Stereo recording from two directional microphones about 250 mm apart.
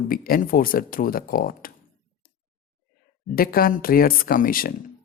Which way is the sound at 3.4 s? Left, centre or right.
Left.